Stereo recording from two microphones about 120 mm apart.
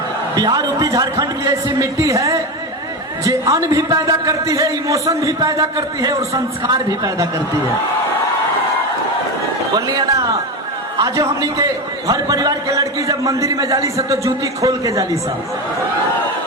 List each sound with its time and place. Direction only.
0.3 s a man's voice: 35° right (ahead or behind)
9.7 s a man's voice: 30° right (ahead or behind)